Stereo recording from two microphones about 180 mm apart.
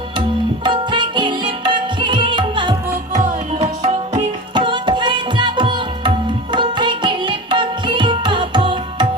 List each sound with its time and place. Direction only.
0.6 s music: 25° right (ahead or behind)
3.1 s music: 40° right (ahead or behind); by 9.0 s 25° right (ahead or behind)